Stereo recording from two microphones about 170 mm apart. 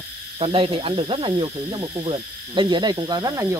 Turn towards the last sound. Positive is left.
turn(degrees=-20)  # may be behind; listen again after turning